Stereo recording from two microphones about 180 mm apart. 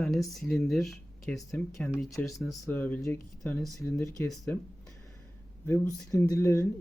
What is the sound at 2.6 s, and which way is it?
Speech, 10° left (ahead or behind).